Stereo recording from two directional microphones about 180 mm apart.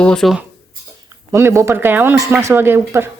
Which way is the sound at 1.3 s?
15° right (ahead or behind).